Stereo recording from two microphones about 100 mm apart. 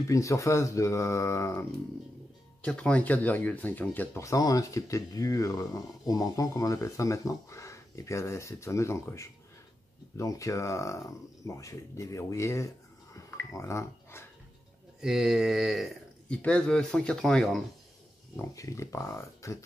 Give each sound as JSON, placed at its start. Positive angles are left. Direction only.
{"t": 0.1, "sound": "speech", "side_deg": 30}
{"t": 2.6, "sound": "speech", "side_deg": 10}
{"t": 4.2, "sound": "speech", "side_deg": 35}
{"t": 15.0, "sound": "a sound", "side_deg": -5}
{"t": 16.3, "sound": "speech", "side_deg": 10}
{"t": 18.3, "sound": "speech", "side_deg": 30}